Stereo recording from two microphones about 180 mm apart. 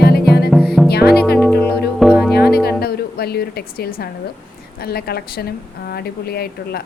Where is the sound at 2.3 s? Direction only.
60° left (ahead or behind).